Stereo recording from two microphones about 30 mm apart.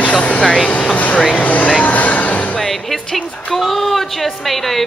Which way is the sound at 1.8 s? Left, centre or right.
Left.